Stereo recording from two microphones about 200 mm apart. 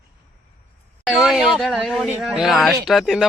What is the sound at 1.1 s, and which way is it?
Speech, centre (ahead or behind).